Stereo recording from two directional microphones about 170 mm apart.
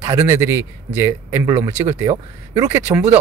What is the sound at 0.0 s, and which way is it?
Speech, 20° right (ahead or behind).